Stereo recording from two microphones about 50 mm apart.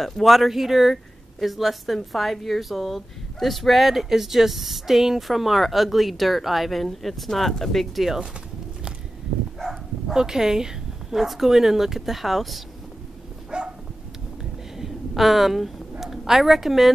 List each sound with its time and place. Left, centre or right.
0.0 s a woman's voice: centre
9.6 s bow-wow: centre
10.1 s speech: centre
13.5 s dog: centre
14.4 s a sound: centre
16.0 s a woman's voice: centre